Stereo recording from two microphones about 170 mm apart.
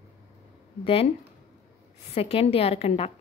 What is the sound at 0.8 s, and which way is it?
Speech, 35° left (ahead or behind).